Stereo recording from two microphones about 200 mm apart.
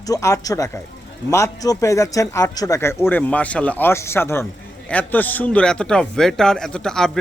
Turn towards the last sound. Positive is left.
turn(degrees=0)  # may be behind; listen again after turning